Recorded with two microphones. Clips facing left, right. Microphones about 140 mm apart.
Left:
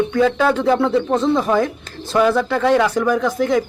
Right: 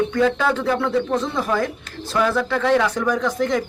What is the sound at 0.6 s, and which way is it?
Speech, 25° left (ahead or behind).